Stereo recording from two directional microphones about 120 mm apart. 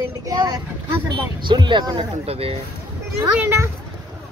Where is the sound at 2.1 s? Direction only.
55° right (ahead or behind).